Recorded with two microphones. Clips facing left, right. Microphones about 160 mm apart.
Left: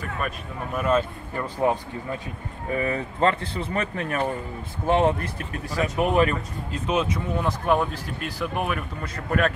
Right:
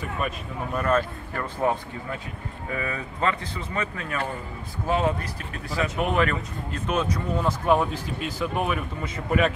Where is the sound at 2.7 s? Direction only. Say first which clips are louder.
Left 5 dB; 30° left (ahead or behind).